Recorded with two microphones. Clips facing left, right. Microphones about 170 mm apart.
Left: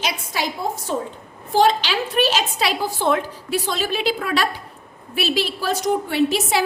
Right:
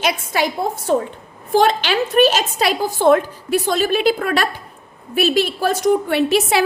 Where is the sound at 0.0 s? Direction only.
60° right (ahead or behind).